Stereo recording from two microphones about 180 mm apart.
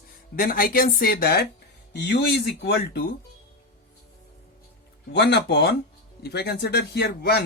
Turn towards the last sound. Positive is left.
turn(degrees=65)  # may be behind; listen again after turning